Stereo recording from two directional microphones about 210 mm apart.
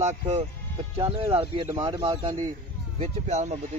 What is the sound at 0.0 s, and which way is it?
Speech, 30° right (ahead or behind).